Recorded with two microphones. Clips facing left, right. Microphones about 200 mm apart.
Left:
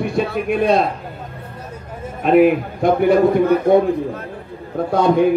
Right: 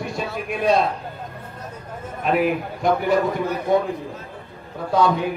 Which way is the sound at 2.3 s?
55° left (ahead or behind).